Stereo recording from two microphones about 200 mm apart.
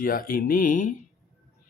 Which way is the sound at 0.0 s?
45° left (ahead or behind).